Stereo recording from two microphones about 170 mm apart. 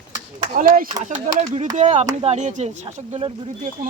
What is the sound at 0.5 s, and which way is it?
Speech, 55° right (ahead or behind).